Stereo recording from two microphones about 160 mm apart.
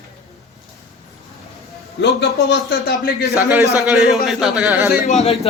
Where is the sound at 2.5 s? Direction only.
90° left.